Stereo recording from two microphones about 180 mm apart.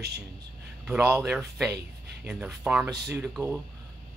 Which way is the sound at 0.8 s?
Centre (ahead or behind).